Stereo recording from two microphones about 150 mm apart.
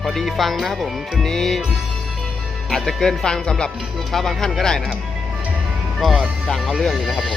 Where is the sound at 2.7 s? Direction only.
Centre (ahead or behind).